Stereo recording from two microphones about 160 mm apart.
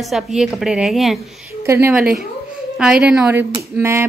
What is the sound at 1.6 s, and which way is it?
A woman's voice, 15° right (ahead or behind).